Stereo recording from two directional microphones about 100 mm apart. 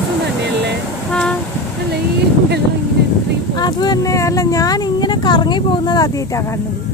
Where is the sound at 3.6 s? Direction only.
45° left (ahead or behind).